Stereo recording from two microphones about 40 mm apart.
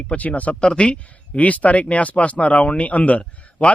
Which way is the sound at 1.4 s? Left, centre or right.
Left.